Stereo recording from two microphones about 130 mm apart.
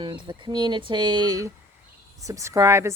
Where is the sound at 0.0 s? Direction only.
35° right (ahead or behind).